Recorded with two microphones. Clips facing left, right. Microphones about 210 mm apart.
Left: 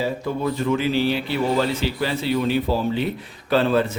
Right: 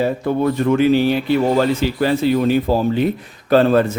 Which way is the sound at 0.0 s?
55° right (ahead or behind).